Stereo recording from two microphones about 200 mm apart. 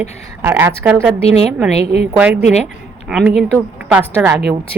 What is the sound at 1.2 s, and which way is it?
Speech, 30° left (ahead or behind).